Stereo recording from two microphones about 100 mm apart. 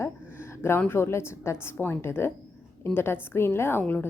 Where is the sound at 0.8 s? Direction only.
20° left (ahead or behind).